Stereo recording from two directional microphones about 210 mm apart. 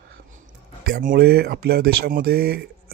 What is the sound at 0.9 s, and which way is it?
Speech, 45° right (ahead or behind).